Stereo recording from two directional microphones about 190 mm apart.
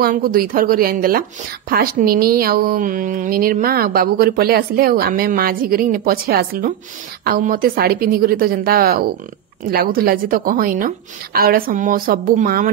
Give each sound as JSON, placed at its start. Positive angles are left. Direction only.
{"t": 0.0, "sound": "speech", "side_deg": -50}